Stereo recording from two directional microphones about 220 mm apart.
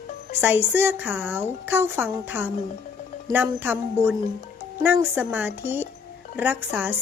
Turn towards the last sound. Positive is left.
turn(degrees=-10)  # may be behind; listen again after turning